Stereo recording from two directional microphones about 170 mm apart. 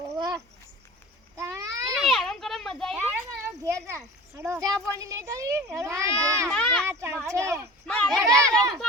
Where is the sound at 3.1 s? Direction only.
15° right (ahead or behind).